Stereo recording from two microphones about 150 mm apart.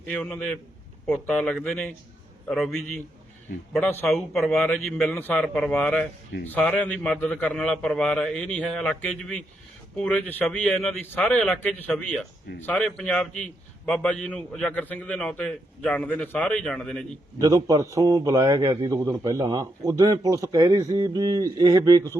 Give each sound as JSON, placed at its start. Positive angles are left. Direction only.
{"t": 0.1, "sound": "a man's voice", "side_deg": 10}
{"t": 4.0, "sound": "a man's voice", "side_deg": 0}
{"t": 17.3, "sound": "a man's voice", "side_deg": -25}